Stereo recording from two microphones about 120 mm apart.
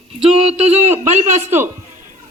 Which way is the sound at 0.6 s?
60° right (ahead or behind).